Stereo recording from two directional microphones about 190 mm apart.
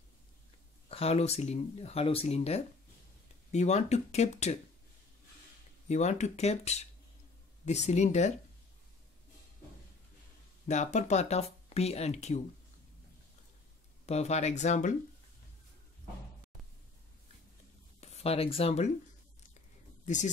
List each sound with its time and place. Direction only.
0.8 s speech: 30° left (ahead or behind)
5.9 s speech: 35° left (ahead or behind)
10.7 s speech: 40° left (ahead or behind)
14.0 s speech: 35° left (ahead or behind)
18.0 s speech: 35° left (ahead or behind)